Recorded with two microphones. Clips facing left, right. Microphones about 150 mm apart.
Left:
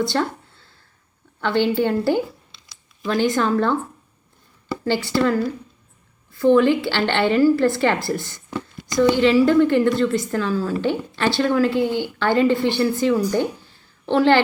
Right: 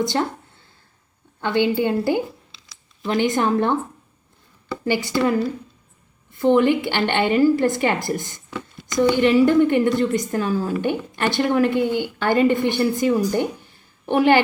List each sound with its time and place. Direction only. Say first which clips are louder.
0.0 s a woman's voice: even; 20° right (ahead or behind)
4.9 s a woman's voice: even; 20° right (ahead or behind)